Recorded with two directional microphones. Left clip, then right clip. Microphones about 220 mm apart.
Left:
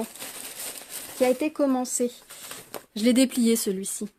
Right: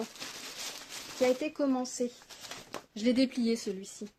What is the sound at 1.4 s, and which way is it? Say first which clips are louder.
Speech: left 7 dB; 35° left (ahead or behind).